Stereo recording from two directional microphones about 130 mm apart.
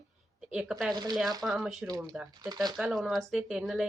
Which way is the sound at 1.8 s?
30° right (ahead or behind).